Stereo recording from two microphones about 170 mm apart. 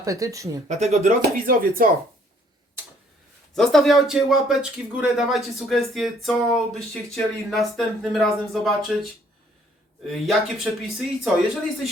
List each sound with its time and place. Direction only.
0.0 s speech: 20° right (ahead or behind)
0.7 s speech: 40° right (ahead or behind)
1.0 s speech: 55° right (ahead or behind)
3.5 s speech: centre (ahead or behind)
10.1 s speech: centre (ahead or behind)